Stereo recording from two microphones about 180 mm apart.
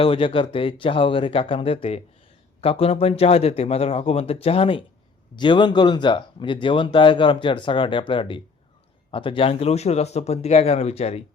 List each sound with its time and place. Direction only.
0.0 s a man's voice: 30° left (ahead or behind)